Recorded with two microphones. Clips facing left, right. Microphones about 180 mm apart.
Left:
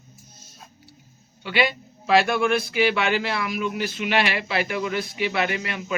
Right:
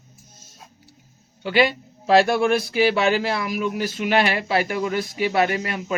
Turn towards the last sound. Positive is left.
turn(degrees=-40)  # may be behind; listen again after turning